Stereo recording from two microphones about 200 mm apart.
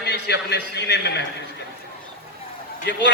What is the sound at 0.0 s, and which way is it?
A man's voice, 60° left (ahead or behind).